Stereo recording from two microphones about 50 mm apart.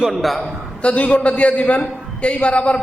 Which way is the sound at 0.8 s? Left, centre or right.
Left.